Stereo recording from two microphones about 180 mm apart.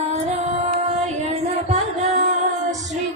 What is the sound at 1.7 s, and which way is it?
Music, 40° right (ahead or behind).